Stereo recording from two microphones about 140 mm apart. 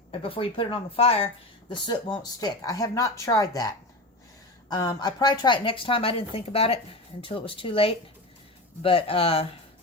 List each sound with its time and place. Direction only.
0.1 s a woman's voice: 40° left (ahead or behind)
2.1 s a woman's voice: 25° left (ahead or behind)